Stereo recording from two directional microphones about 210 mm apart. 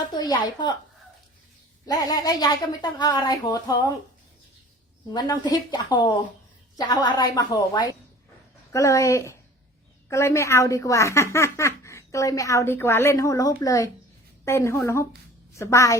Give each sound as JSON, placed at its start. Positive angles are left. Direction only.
{"t": 0.2, "sound": "a woman's voice", "side_deg": 20}
{"t": 1.9, "sound": "a woman's voice", "side_deg": 20}
{"t": 5.0, "sound": "a woman's voice", "side_deg": 20}